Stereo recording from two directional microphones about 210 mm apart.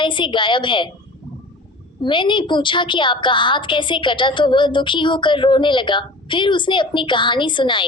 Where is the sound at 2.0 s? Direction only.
25° left (ahead or behind).